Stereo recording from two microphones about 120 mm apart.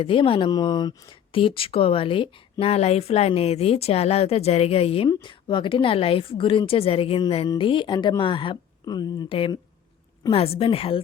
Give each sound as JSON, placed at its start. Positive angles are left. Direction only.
{"t": 0.0, "sound": "speech", "side_deg": 45}
{"t": 5.0, "sound": "speech", "side_deg": 40}
{"t": 10.3, "sound": "speech", "side_deg": 55}